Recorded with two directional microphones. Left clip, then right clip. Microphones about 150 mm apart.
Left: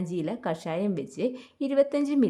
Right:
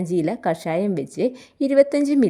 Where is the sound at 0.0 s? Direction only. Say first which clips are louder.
Right 9 dB; 30° right (ahead or behind).